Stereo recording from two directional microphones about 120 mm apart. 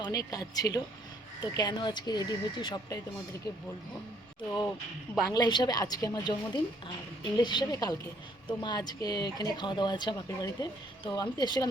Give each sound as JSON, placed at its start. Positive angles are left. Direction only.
{"t": 0.0, "sound": "speech", "side_deg": 30}
{"t": 5.3, "sound": "speech", "side_deg": 35}